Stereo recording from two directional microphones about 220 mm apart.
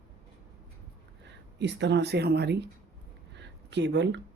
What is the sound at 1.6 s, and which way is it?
Speech, 50° right (ahead or behind).